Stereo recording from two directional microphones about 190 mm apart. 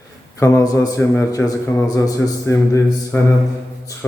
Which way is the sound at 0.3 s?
15° left (ahead or behind).